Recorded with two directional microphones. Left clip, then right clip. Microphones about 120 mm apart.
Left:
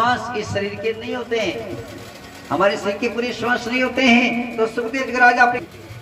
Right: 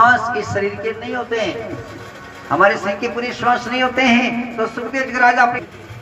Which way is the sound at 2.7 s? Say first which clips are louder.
Right 2 dB; 35° left (ahead or behind).